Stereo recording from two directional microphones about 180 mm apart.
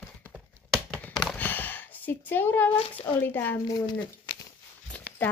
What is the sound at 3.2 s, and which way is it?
Speech, 10° left (ahead or behind).